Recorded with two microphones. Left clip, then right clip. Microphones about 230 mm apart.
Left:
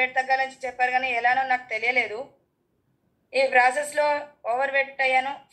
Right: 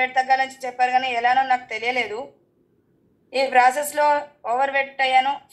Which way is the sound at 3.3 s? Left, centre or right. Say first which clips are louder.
Right 3 dB; right.